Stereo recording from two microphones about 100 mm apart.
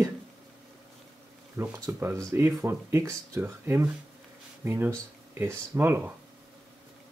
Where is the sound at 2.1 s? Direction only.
30° right (ahead or behind).